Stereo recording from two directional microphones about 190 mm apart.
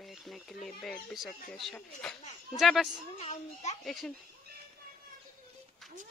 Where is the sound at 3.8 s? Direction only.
Centre (ahead or behind).